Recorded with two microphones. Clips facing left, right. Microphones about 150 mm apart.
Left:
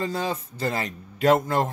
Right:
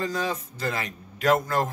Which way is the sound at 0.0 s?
30° left (ahead or behind).